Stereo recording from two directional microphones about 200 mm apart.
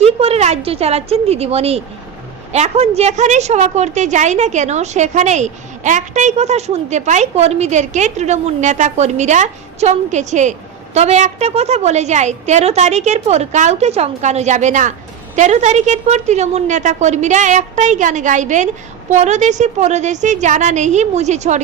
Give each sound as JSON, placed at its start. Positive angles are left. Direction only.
{"t": 0.0, "sound": "a woman's voice", "side_deg": -30}